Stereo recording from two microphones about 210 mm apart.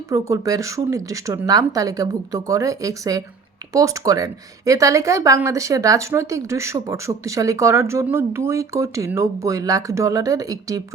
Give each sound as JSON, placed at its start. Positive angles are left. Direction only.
{"t": 0.1, "sound": "a woman's voice", "side_deg": -15}